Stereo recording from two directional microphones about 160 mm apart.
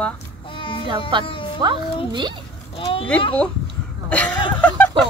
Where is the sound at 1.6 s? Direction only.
25° right (ahead or behind).